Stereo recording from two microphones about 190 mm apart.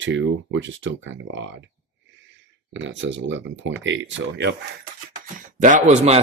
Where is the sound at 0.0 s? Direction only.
80° right.